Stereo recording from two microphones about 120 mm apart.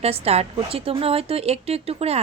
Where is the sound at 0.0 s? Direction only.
60° right (ahead or behind).